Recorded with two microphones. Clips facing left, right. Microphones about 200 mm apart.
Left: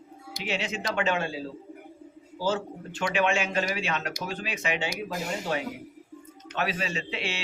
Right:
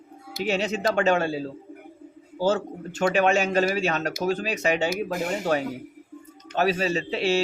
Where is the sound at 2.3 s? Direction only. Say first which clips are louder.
Right 5 dB; 45° right (ahead or behind).